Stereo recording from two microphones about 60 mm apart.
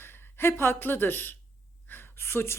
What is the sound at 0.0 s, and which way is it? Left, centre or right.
A woman's voice, left.